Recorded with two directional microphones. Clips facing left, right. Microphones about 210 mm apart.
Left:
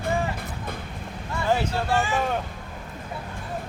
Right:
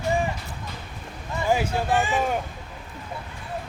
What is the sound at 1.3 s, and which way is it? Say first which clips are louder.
Speech: right 1 dB; 10° right (ahead or behind).